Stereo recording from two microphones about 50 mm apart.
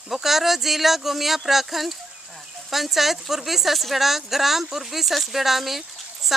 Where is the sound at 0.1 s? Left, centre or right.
Centre.